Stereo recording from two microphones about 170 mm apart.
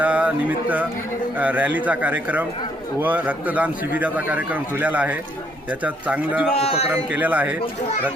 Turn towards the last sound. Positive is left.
turn(degrees=-10)  # may be behind; listen again after turning